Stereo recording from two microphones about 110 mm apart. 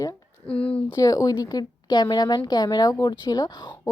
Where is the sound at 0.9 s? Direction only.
35° left (ahead or behind).